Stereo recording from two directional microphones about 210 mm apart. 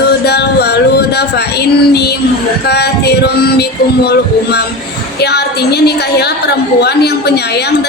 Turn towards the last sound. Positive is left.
turn(degrees=50)  # may be behind; listen again after turning